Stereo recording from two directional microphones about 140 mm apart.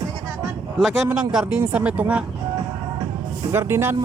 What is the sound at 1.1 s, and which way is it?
A man's voice, 5° right (ahead or behind).